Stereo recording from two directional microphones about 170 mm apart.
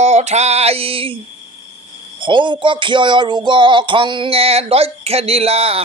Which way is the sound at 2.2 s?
30° right (ahead or behind).